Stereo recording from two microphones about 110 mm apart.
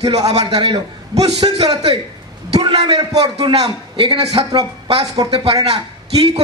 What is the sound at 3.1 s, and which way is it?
A man's voice, 65° right (ahead or behind).